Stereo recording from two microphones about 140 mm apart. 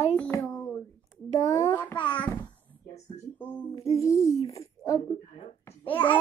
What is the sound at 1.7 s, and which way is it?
Speech, 10° left (ahead or behind).